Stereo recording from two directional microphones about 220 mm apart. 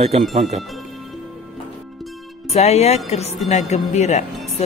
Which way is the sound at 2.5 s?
30° left (ahead or behind).